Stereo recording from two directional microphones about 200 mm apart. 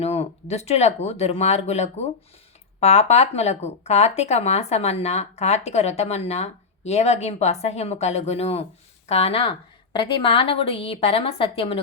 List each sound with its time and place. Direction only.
0.0 s a woman's voice: 30° left (ahead or behind)